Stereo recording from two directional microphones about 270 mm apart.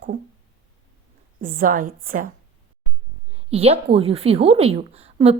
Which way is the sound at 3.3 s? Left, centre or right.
Right.